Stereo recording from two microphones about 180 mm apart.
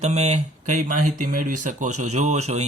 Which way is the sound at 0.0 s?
40° right (ahead or behind).